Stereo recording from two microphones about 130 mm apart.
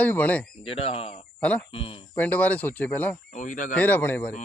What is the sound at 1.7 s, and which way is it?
Speech, 45° left (ahead or behind).